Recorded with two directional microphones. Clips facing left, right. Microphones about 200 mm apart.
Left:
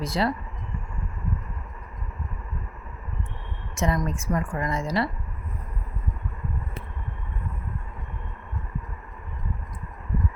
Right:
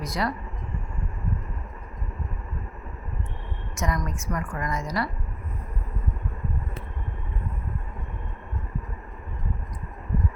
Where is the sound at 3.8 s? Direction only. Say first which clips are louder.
Left 4 dB; 30° left (ahead or behind).